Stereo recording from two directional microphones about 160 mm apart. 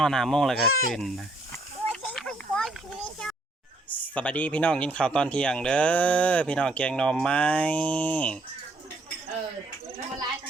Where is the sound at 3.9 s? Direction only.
10° left (ahead or behind).